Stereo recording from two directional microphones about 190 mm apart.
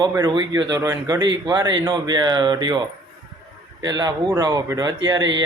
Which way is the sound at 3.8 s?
20° right (ahead or behind).